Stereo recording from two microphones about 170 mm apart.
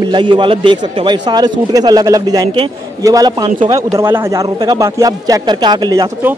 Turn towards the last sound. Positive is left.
turn(degrees=-20)  # may be behind; listen again after turning